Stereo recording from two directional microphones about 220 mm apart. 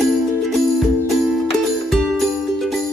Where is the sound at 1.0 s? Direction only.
Centre (ahead or behind).